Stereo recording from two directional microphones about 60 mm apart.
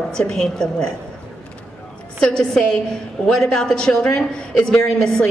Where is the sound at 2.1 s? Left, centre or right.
Centre.